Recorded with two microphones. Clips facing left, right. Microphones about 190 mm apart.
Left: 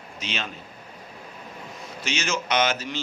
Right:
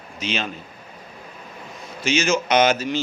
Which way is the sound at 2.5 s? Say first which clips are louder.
Right 5 dB; 10° right (ahead or behind).